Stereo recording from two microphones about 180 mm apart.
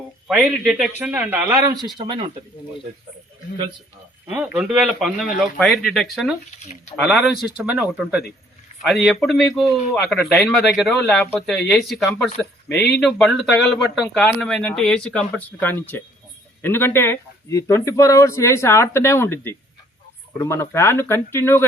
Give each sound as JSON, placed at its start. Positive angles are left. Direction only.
{"t": 0.3, "sound": "a man's voice", "side_deg": 0}
{"t": 4.3, "sound": "a man's voice", "side_deg": -10}